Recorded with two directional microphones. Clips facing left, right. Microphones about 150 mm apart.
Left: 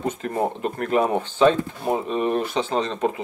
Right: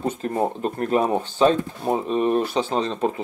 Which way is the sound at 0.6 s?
35° right (ahead or behind).